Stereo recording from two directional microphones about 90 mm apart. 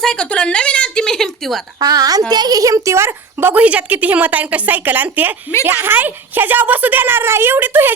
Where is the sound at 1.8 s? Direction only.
45° right (ahead or behind).